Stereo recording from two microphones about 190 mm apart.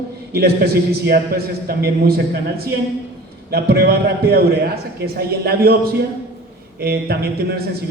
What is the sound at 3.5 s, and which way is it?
A man's voice, 55° right (ahead or behind).